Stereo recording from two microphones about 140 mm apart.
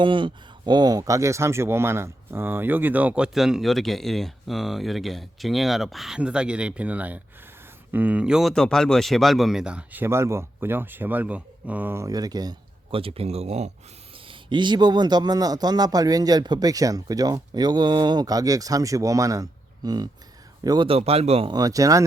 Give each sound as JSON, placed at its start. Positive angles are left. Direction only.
{"t": 0.0, "sound": "speech", "side_deg": -35}
{"t": 13.0, "sound": "speech", "side_deg": -45}
{"t": 14.3, "sound": "a man's voice", "side_deg": -35}
{"t": 21.5, "sound": "a man's voice", "side_deg": -25}